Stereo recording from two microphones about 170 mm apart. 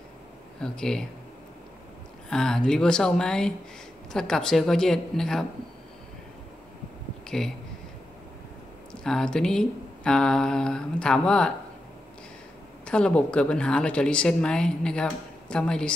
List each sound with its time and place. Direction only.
0.6 s speech: 5° left (ahead or behind)
2.2 s speech: 5° left (ahead or behind)
7.2 s speech: 5° left (ahead or behind)
9.0 s speech: 5° left (ahead or behind)
12.8 s speech: 5° left (ahead or behind)